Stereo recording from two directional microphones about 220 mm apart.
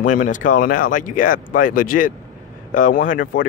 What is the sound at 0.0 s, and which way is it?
Speech, 35° left (ahead or behind).